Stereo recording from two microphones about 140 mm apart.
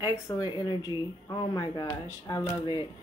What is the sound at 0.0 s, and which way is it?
A woman's voice, 25° left (ahead or behind).